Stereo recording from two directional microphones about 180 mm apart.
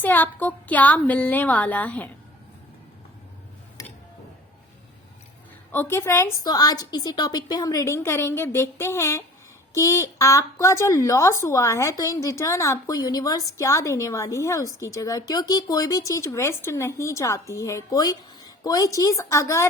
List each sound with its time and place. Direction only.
0.0 s a woman's voice: 10° left (ahead or behind)
3.8 s a sound: 20° left (ahead or behind)
5.7 s a woman's voice: 10° left (ahead or behind)